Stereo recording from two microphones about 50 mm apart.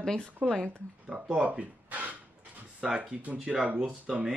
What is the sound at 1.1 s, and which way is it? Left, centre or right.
Speech, centre.